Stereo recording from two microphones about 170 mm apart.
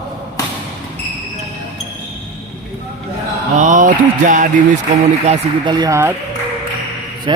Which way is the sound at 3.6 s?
50° right (ahead or behind).